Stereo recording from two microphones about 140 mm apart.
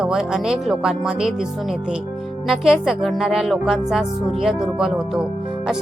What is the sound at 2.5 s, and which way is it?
Speech, centre (ahead or behind).